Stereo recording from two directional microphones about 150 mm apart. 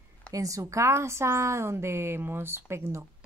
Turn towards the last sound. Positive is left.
turn(degrees=-20)  # may be behind; listen again after turning